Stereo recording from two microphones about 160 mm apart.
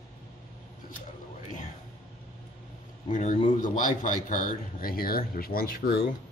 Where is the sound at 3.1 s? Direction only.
50° left (ahead or behind).